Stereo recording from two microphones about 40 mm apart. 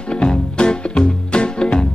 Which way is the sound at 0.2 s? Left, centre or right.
Left.